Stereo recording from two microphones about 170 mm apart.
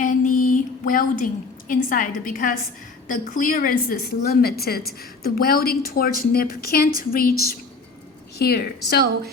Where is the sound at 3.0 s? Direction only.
50° left (ahead or behind); by 9.0 s 65° left (ahead or behind).